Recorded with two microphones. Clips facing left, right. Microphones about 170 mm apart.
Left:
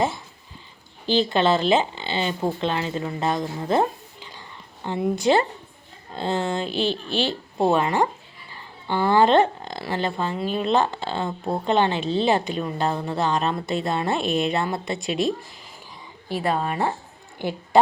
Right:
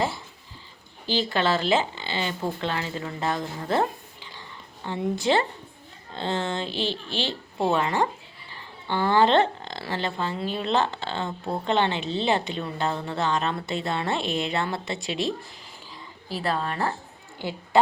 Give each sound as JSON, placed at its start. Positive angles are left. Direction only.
{"t": 1.0, "sound": "speech", "side_deg": 20}
{"t": 4.9, "sound": "speech", "side_deg": 15}
{"t": 12.1, "sound": "a woman's voice", "side_deg": -20}
{"t": 12.5, "sound": "speech", "side_deg": 15}
{"t": 16.4, "sound": "speech", "side_deg": 10}